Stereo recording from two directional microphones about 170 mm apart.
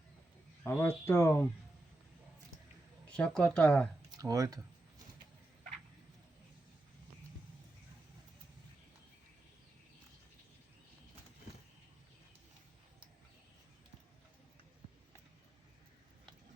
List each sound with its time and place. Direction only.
0.6 s speech: 10° left (ahead or behind)
3.1 s speech: 5° left (ahead or behind)
4.2 s speech: 20° right (ahead or behind)